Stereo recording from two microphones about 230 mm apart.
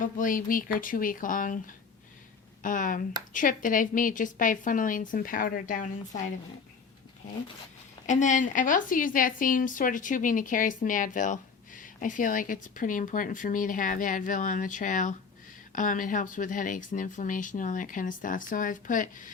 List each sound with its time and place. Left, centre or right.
0.0 s a woman's voice: left
8.0 s a woman's voice: left